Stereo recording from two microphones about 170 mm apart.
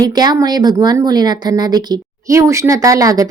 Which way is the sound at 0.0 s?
25° right (ahead or behind).